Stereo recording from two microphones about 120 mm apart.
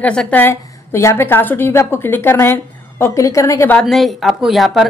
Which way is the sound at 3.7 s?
5° left (ahead or behind).